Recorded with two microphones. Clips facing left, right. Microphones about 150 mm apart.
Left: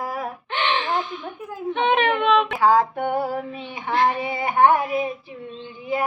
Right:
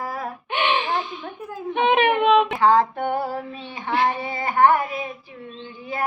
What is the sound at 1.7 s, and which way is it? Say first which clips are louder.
Whimper: right 2 dB; 15° right (ahead or behind).